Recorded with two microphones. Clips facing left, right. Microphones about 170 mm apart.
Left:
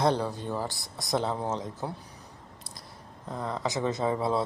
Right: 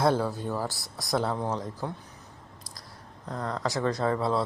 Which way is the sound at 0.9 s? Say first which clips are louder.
Right 1 dB; centre (ahead or behind).